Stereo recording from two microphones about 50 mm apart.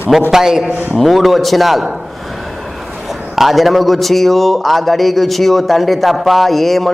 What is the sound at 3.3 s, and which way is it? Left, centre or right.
Speech, centre.